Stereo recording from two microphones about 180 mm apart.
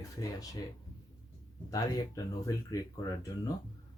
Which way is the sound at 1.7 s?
20° left (ahead or behind).